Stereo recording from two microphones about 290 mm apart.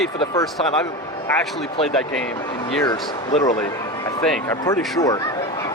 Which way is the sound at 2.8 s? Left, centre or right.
Centre.